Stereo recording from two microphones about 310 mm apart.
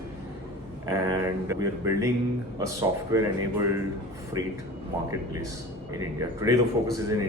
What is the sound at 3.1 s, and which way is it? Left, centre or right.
Speech, centre.